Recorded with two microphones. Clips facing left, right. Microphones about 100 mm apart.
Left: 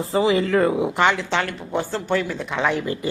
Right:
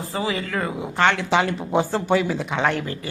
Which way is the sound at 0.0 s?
25° left (ahead or behind).